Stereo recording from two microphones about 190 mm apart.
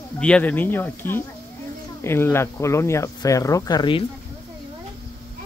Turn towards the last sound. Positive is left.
turn(degrees=25)  # may be behind; listen again after turning